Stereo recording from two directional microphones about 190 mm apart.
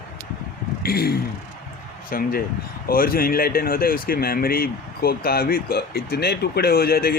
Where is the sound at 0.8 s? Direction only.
55° left (ahead or behind).